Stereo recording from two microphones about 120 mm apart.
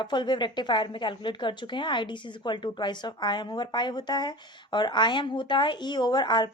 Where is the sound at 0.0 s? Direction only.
40° left (ahead or behind).